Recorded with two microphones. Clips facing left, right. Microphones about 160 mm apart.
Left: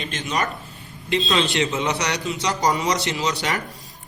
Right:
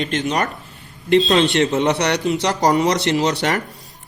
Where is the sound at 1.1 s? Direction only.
45° right (ahead or behind).